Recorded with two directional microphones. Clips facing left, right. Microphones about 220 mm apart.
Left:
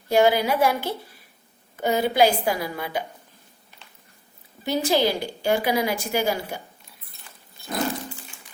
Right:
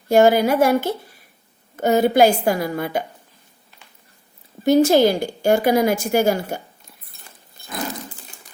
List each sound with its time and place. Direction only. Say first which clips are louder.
0.1 s a woman's voice: right 5 dB; 45° right (ahead or behind)
4.6 s a woman's voice: right 8 dB; 45° right (ahead or behind)